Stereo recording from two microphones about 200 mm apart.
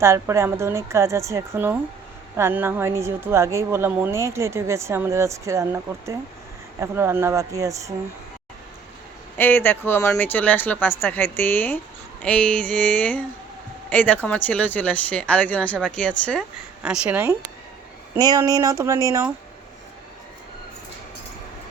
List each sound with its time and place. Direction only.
0.0 s a woman's voice: 15° right (ahead or behind)
9.4 s speech: 10° left (ahead or behind)
16.8 s a woman's voice: 5° right (ahead or behind)